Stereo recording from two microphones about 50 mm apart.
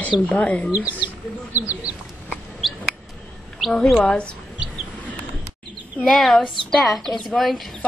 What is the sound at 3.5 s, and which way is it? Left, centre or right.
Speech, centre.